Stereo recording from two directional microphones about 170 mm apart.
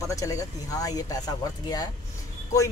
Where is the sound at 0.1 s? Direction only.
20° left (ahead or behind).